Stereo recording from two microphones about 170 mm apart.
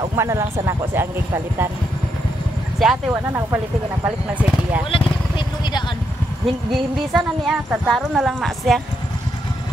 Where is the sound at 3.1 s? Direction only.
15° right (ahead or behind).